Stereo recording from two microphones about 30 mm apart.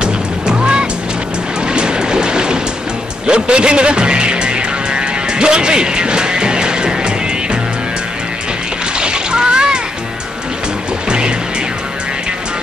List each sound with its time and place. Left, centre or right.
0.0 s music: right
8.9 s splash: right
11.1 s music: right